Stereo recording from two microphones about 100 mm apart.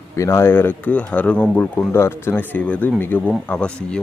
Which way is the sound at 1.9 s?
25° left (ahead or behind).